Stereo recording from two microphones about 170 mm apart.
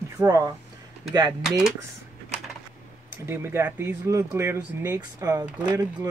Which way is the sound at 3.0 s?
15° right (ahead or behind).